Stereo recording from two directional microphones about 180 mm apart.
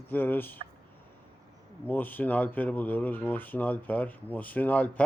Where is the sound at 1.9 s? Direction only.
10° left (ahead or behind).